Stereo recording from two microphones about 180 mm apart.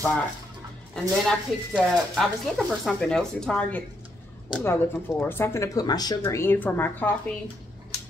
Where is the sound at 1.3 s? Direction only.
Centre (ahead or behind).